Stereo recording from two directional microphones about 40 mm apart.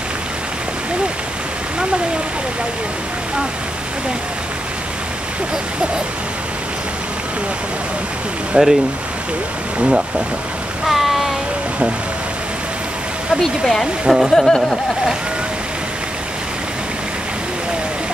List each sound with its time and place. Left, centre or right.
8.5 s speech: right
9.8 s speech: right
10.9 s a sound: centre
13.4 s speech: centre
14.0 s speech: centre
14.3 s speech: centre